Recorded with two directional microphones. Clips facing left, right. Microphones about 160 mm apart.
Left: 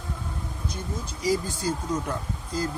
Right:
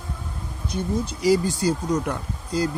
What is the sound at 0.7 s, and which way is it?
Speech, 70° right (ahead or behind).